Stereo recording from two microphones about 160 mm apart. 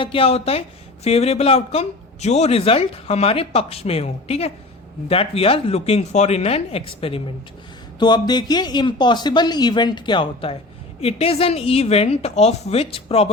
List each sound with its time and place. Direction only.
0.0 s a man's voice: 35° left (ahead or behind)